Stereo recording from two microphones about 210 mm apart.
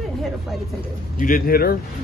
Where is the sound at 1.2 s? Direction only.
40° left (ahead or behind).